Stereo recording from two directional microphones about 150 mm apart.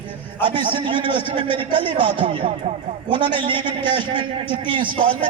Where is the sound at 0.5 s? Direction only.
30° right (ahead or behind).